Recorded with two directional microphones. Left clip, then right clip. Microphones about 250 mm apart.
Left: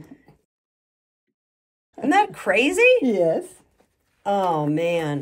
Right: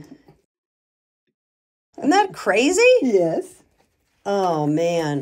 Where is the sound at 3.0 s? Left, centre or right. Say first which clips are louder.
Right 1 dB; centre.